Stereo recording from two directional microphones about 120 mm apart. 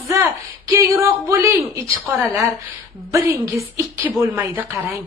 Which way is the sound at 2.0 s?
15° right (ahead or behind).